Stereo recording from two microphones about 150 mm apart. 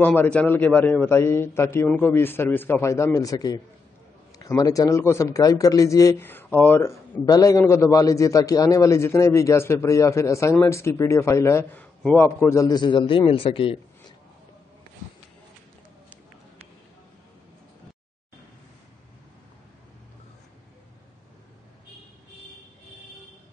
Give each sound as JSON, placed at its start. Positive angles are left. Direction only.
{"t": 0.0, "sound": "a man's voice", "side_deg": 15}
{"t": 7.2, "sound": "a man's voice", "side_deg": 25}